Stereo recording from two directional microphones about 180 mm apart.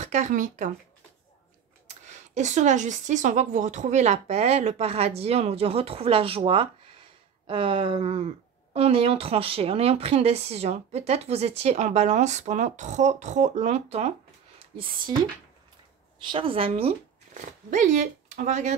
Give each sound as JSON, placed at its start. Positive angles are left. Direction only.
{"t": 0.0, "sound": "speech", "side_deg": -40}
{"t": 2.3, "sound": "speech", "side_deg": -40}
{"t": 16.3, "sound": "speech", "side_deg": -30}